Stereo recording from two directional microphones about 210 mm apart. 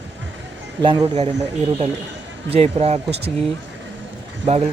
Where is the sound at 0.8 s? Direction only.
20° right (ahead or behind).